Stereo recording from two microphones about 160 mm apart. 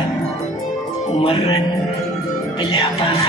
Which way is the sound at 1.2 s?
30° left (ahead or behind).